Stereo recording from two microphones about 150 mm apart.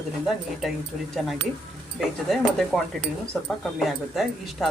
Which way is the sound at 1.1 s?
Centre (ahead or behind).